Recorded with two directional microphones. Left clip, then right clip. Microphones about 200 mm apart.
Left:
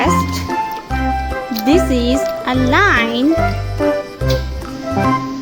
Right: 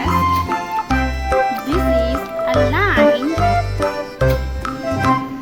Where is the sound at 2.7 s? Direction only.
35° left (ahead or behind).